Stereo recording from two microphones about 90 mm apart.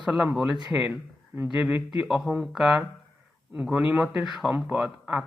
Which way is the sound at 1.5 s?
15° right (ahead or behind).